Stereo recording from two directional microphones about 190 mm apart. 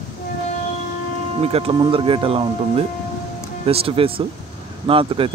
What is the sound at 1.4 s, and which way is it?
Speech, 30° right (ahead or behind).